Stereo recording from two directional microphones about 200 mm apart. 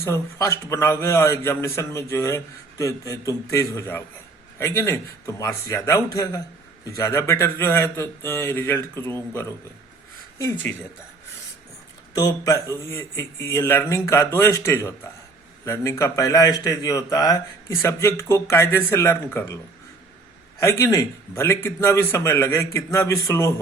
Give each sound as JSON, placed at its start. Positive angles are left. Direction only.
{"t": 0.0, "sound": "a man's voice", "side_deg": 15}
{"t": 12.1, "sound": "a man's voice", "side_deg": 20}
{"t": 20.6, "sound": "a man's voice", "side_deg": 15}